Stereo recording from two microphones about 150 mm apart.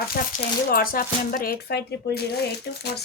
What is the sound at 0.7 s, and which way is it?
Speech, 75° left (ahead or behind).